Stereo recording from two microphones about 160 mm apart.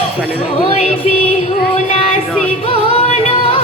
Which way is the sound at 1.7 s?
45° left (ahead or behind).